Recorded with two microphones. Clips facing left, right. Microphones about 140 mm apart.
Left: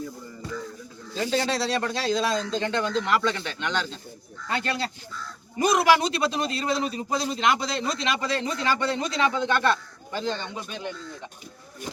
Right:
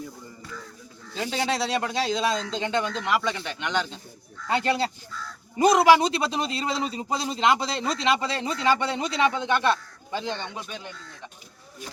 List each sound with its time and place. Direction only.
1.1 s a man's voice: 15° right (ahead or behind)